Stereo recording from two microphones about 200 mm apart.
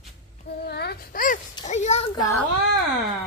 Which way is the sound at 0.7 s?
55° left (ahead or behind).